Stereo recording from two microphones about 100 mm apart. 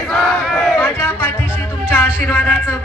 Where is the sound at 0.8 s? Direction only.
15° left (ahead or behind).